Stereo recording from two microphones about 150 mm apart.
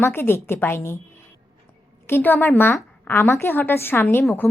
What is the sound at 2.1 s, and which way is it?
A woman's voice, 15° left (ahead or behind).